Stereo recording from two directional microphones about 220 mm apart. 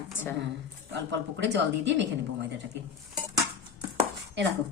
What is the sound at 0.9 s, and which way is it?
Speech, 55° right (ahead or behind).